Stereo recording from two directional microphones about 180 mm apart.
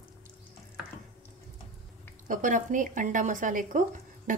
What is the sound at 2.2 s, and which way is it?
A woman's voice, 45° right (ahead or behind).